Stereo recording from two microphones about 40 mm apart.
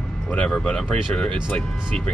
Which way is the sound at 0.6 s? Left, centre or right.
Left.